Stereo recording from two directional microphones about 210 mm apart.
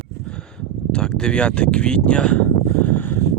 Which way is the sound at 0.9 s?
5° left (ahead or behind).